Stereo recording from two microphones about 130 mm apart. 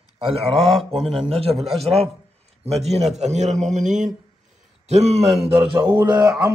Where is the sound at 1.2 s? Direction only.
50° right (ahead or behind); by 4.1 s 70° right (ahead or behind).